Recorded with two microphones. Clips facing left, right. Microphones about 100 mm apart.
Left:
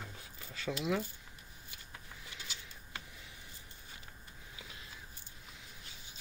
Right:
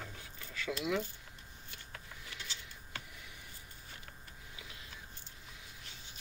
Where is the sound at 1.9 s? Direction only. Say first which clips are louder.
Right 1 dB; 15° left (ahead or behind).